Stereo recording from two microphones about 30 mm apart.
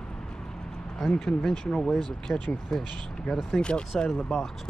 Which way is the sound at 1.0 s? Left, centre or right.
Centre.